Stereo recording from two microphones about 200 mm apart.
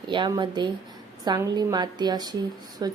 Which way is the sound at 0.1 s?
25° right (ahead or behind).